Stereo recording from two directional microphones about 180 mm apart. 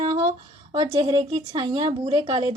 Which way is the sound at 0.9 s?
20° right (ahead or behind).